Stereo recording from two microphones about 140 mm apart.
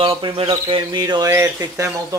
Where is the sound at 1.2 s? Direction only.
20° right (ahead or behind).